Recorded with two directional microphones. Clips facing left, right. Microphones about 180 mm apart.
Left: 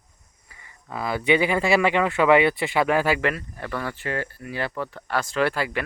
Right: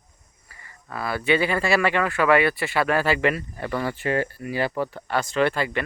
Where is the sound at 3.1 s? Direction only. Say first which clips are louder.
Right 3 dB; centre (ahead or behind).